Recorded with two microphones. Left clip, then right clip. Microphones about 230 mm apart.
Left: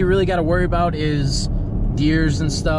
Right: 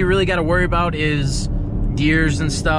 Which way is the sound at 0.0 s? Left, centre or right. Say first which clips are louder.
Even; right.